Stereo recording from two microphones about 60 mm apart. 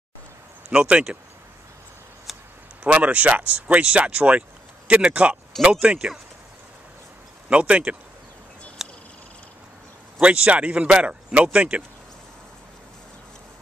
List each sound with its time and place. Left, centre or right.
0.7 s speech: centre
2.3 s a sound: centre
2.8 s speech: right
7.4 s speech: centre
8.8 s a sound: centre
10.2 s speech: right